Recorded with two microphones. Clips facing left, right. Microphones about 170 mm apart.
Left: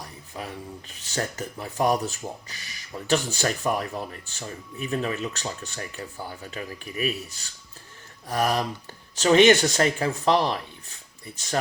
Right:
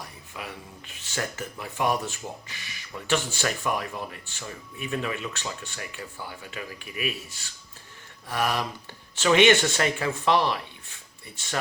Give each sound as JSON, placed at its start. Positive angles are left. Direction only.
{"t": 0.3, "sound": "speech", "side_deg": 40}